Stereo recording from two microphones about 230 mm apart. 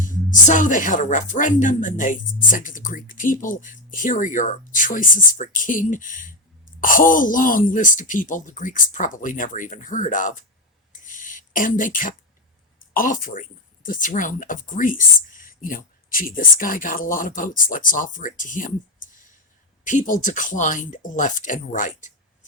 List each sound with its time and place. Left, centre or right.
0.0 s a woman's voice: left
10.9 s a sound: left
12.9 s a woman's voice: left